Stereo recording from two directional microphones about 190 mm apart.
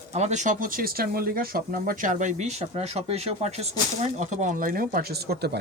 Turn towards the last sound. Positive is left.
turn(degrees=-60)  # may be behind; listen again after turning